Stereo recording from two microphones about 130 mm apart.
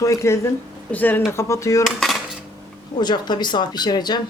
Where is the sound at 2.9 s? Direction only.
35° left (ahead or behind).